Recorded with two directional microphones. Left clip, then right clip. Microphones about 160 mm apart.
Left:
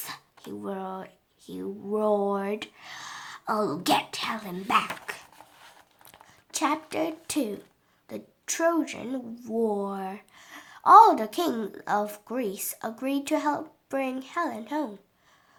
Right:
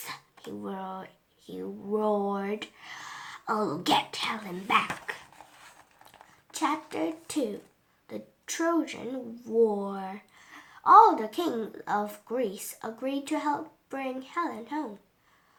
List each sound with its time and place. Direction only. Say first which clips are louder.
0.6 s a woman's voice: left 3 dB; 30° left (ahead or behind)